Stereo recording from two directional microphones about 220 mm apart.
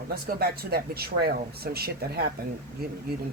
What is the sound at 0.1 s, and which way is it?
Speech, 45° right (ahead or behind).